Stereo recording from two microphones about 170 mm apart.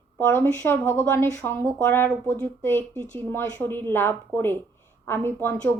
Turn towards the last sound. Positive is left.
turn(degrees=15)  # may be behind; listen again after turning